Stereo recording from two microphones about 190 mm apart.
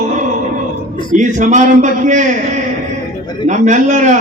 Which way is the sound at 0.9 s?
25° left (ahead or behind).